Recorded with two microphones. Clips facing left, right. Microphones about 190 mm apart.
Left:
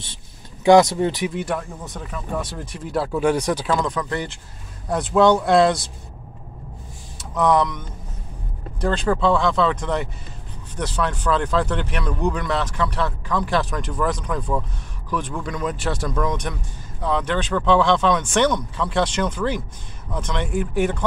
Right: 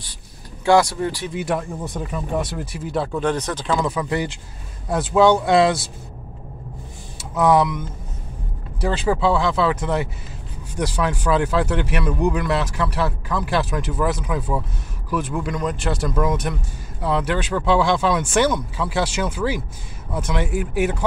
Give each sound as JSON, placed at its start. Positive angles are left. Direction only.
{"t": 0.7, "sound": "speech", "side_deg": 20}
{"t": 1.3, "sound": "speech", "side_deg": -10}
{"t": 3.7, "sound": "speech", "side_deg": -5}
{"t": 7.2, "sound": "speech", "side_deg": -5}
{"t": 8.8, "sound": "speech", "side_deg": -5}